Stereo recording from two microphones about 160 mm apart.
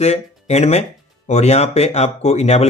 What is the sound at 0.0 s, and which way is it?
Speech, 45° left (ahead or behind).